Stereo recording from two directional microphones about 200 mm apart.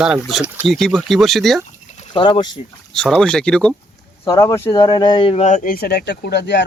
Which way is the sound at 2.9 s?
5° left (ahead or behind).